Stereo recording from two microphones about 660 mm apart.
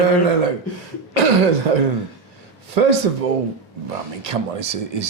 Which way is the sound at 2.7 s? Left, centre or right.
Right.